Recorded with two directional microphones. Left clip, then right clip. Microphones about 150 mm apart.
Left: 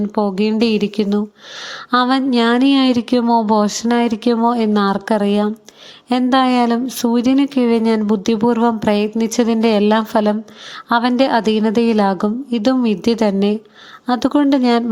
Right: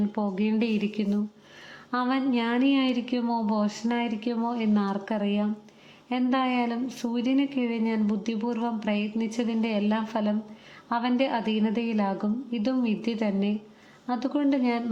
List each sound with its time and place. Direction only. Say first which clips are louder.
0.1 s speech: left 11 dB; 35° left (ahead or behind)